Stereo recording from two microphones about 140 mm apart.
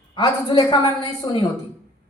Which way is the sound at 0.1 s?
30° left (ahead or behind).